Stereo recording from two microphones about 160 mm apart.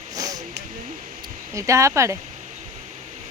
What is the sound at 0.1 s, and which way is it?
Hiss, 20° right (ahead or behind).